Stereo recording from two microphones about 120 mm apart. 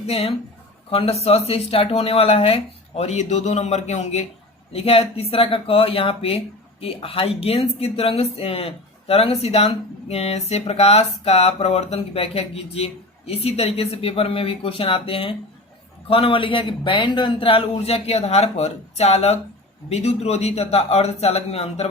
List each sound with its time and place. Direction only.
0.0 s speech: 55° left (ahead or behind)
4.7 s speech: 55° left (ahead or behind)